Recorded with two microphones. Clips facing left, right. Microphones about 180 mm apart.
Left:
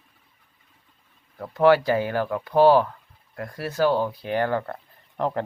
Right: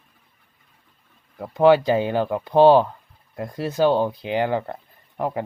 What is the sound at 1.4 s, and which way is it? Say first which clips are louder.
Speech: right 2 dB; 20° right (ahead or behind).